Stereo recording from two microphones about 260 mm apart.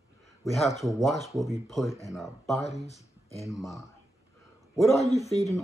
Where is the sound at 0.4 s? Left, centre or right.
Centre.